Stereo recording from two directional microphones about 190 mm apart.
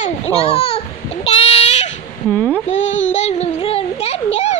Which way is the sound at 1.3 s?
30° left (ahead or behind).